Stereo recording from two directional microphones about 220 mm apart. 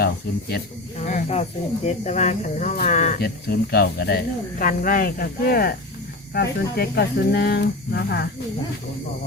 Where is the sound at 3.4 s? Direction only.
45° left (ahead or behind).